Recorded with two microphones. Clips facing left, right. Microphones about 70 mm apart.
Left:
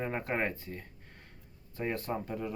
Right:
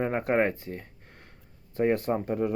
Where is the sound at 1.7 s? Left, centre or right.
Right.